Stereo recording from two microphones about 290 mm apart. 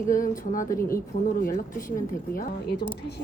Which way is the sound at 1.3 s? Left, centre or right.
Left.